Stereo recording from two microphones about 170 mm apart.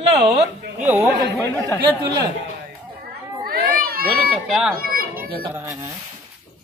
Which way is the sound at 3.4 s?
60° right (ahead or behind).